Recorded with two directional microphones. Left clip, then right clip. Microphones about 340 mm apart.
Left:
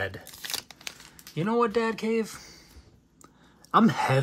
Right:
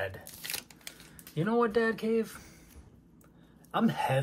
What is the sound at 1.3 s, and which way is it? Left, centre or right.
Speech, centre.